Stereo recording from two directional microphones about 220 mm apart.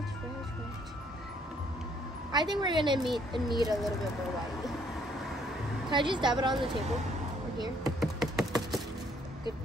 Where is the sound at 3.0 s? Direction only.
Centre (ahead or behind).